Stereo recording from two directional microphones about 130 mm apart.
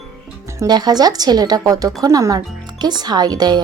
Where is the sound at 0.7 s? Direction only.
30° right (ahead or behind).